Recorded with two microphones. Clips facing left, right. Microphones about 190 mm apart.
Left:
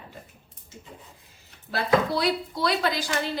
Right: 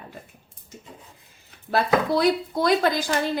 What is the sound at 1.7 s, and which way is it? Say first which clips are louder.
Speech: right 2 dB; 50° right (ahead or behind).